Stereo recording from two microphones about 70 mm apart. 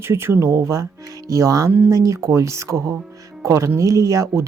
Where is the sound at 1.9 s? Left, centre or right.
Right.